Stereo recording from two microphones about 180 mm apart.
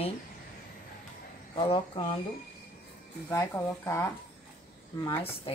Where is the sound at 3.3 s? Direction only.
15° left (ahead or behind).